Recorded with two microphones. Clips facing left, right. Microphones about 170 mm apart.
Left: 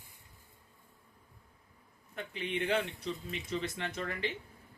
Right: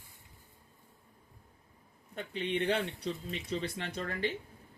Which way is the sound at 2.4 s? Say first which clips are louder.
Right 1 dB; 30° right (ahead or behind).